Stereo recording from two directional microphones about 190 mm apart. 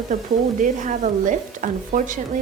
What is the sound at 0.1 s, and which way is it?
Stir, 40° right (ahead or behind).